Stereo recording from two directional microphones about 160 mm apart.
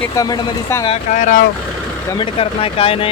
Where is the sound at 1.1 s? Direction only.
50° left (ahead or behind).